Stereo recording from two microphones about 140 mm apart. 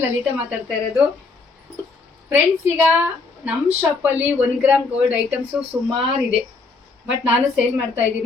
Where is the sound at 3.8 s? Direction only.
10° right (ahead or behind).